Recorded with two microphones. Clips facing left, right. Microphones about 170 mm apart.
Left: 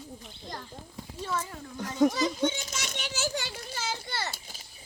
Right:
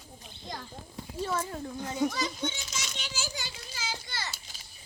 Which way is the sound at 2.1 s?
45° left (ahead or behind).